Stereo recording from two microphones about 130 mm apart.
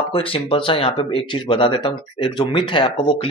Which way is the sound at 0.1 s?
45° left (ahead or behind).